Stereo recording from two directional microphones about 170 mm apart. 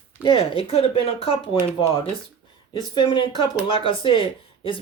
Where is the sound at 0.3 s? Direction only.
35° left (ahead or behind).